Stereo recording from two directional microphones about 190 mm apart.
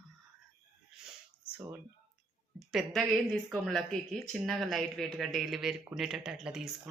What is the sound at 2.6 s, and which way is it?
Speech, centre (ahead or behind).